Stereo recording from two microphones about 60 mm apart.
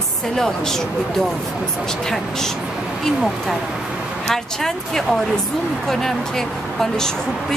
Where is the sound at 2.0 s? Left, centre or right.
Centre.